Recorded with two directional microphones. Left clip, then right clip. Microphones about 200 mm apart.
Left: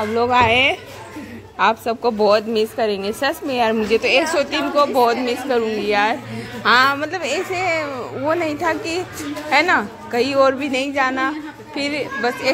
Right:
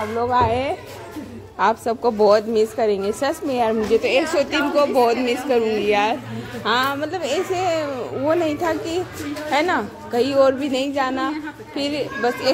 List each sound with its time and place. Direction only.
0.4 s speech: 5° right (ahead or behind)
1.6 s a woman's voice: 15° right (ahead or behind)
6.6 s a woman's voice: centre (ahead or behind)